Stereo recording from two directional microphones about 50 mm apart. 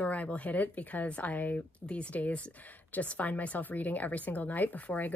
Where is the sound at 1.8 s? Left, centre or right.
Left.